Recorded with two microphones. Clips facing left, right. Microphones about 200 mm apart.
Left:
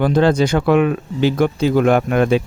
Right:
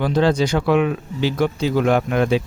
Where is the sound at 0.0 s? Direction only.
50° left (ahead or behind).